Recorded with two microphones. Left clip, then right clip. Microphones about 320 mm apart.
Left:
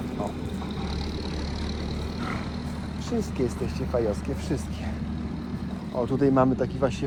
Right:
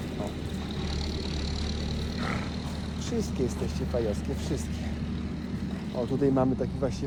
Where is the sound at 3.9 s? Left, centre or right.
Centre.